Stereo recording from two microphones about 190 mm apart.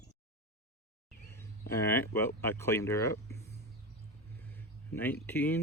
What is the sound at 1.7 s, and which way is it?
Speech, 15° left (ahead or behind).